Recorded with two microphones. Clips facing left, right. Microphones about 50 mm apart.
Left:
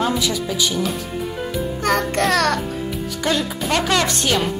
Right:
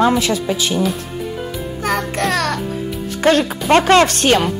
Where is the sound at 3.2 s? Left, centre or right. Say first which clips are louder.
Right 8 dB; right.